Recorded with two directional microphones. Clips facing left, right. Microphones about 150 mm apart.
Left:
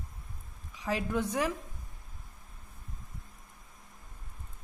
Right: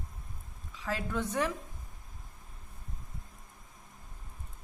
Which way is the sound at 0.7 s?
15° left (ahead or behind).